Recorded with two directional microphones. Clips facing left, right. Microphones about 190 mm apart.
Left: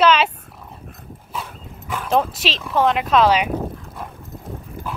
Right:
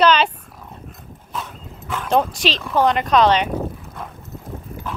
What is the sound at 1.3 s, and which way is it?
Dog, 10° left (ahead or behind).